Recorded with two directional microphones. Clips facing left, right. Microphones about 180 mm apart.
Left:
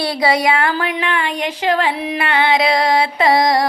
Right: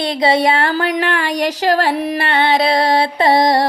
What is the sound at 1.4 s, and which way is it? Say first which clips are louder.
Music: right 3 dB; 40° right (ahead or behind).